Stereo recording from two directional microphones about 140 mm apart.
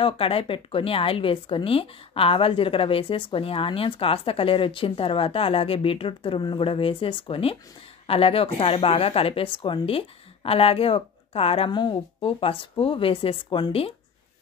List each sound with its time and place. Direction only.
0.0 s speech: 40° left (ahead or behind)